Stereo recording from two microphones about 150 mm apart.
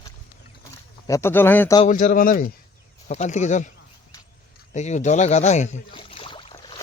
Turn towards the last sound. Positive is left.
turn(degrees=35)  # may be behind; listen again after turning